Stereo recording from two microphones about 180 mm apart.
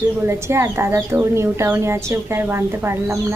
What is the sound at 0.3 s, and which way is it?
A woman's voice, 15° right (ahead or behind).